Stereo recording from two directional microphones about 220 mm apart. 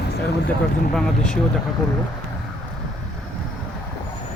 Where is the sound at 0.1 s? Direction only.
50° left (ahead or behind).